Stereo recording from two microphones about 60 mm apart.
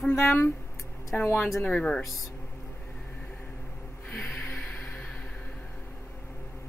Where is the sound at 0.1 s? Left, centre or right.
Left.